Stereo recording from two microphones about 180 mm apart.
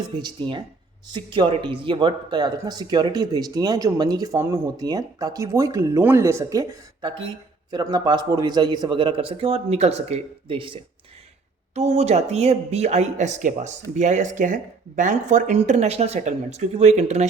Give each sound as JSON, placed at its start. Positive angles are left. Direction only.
{"t": 0.2, "sound": "speech", "side_deg": -25}